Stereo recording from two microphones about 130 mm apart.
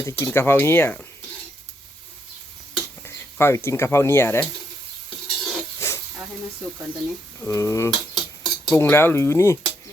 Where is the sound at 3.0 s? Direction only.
20° left (ahead or behind).